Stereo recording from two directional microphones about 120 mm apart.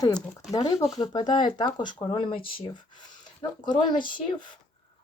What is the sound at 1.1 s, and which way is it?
Speech, 40° left (ahead or behind).